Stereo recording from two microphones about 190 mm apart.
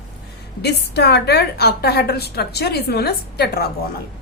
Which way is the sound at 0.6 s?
60° left (ahead or behind).